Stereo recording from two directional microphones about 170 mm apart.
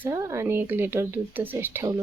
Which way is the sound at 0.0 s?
20° right (ahead or behind).